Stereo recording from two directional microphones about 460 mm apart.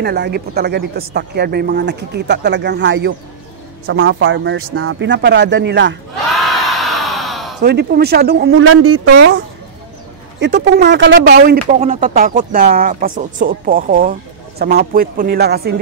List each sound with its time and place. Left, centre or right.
0.0 s a woman's voice: right
6.4 s a sound: centre
7.6 s a woman's voice: right
10.4 s a woman's voice: right